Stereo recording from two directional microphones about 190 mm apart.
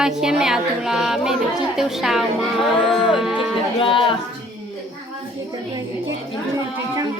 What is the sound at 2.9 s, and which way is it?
Music, centre (ahead or behind).